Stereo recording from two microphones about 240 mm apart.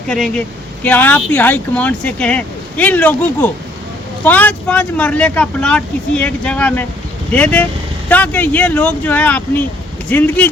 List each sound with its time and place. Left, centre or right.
0.1 s speech: centre